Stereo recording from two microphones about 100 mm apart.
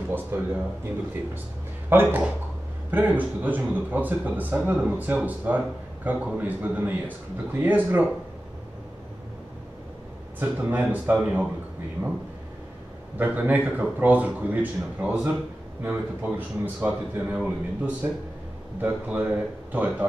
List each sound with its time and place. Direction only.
0.3 s speech: 20° right (ahead or behind)
1.9 s speech: 20° right (ahead or behind)
10.4 s speech: 15° right (ahead or behind)
13.2 s speech: 15° right (ahead or behind)